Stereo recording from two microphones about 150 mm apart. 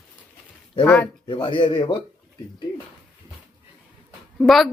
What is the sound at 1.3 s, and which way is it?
Speech, 30° left (ahead or behind).